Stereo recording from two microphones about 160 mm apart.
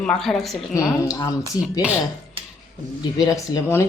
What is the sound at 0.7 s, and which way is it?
Speech, 20° left (ahead or behind).